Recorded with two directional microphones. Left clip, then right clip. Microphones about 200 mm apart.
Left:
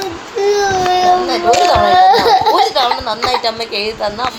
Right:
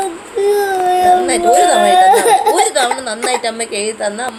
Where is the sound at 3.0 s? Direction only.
30° right (ahead or behind).